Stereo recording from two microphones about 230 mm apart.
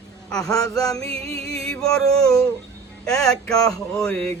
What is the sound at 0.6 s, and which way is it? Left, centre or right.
Music, centre.